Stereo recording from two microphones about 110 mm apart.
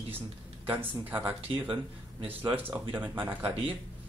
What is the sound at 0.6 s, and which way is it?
Speech, 15° right (ahead or behind).